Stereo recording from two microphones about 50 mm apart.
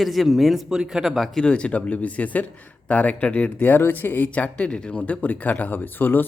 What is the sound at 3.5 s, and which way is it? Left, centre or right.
Speech, left.